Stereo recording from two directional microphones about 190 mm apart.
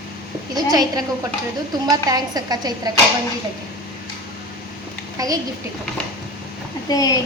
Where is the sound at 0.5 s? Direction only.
20° right (ahead or behind).